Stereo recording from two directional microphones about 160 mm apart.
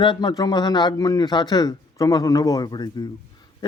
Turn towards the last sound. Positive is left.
turn(degrees=25)  # may be behind; listen again after turning